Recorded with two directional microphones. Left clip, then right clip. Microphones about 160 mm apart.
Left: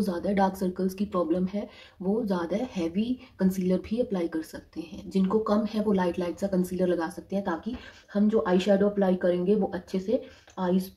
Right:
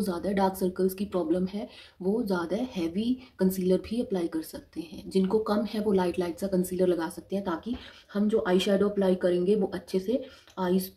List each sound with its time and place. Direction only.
0.0 s speech: 5° right (ahead or behind)